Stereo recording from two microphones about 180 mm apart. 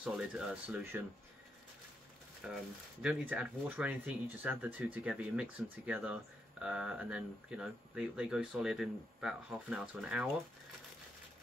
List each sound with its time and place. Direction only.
0.0 s speech: 5° right (ahead or behind)
2.4 s speech: 5° right (ahead or behind)